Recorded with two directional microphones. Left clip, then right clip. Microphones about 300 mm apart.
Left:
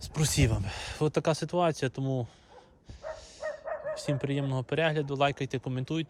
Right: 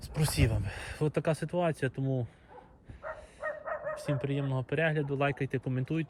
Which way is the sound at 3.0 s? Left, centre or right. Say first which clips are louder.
Left 1 dB; left.